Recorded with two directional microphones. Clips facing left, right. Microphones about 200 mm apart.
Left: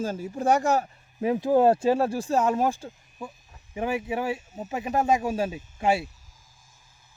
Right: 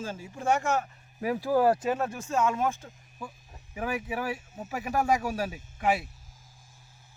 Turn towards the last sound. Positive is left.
turn(degrees=30)  # may be behind; listen again after turning